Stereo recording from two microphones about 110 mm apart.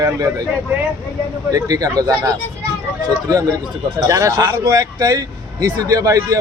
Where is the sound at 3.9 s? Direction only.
30° right (ahead or behind).